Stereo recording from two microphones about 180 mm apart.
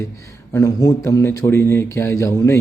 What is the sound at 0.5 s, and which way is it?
Speech, 20° left (ahead or behind).